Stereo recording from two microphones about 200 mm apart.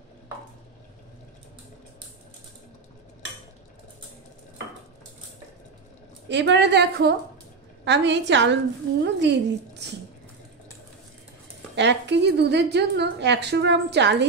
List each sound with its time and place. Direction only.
6.2 s a woman's voice: 60° right (ahead or behind)
11.7 s a woman's voice: 60° right (ahead or behind)